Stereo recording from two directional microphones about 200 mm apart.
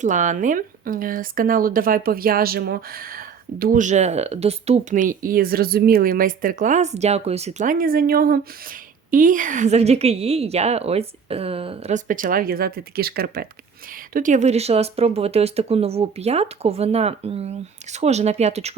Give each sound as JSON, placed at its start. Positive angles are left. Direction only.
{"t": 0.0, "sound": "a woman's voice", "side_deg": -40}